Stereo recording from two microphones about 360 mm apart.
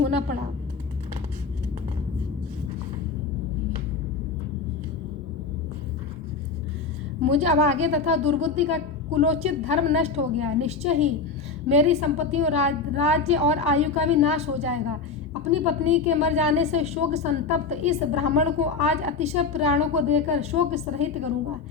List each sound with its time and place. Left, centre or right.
7.2 s a woman's voice: centre